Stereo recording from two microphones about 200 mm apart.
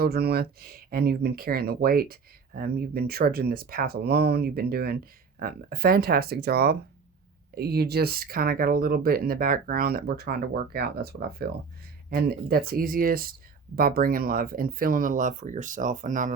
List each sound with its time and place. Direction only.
0.0 s speech: 50° right (ahead or behind)